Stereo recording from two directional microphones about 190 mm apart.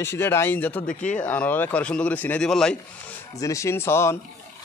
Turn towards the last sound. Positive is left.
turn(degrees=15)  # may be behind; listen again after turning